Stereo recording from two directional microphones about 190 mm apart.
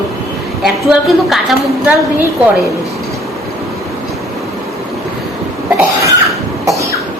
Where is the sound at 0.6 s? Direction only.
Centre (ahead or behind).